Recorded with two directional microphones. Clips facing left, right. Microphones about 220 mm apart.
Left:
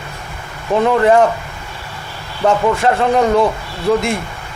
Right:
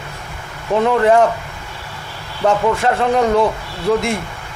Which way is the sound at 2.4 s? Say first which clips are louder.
Left 1 dB; 25° left (ahead or behind).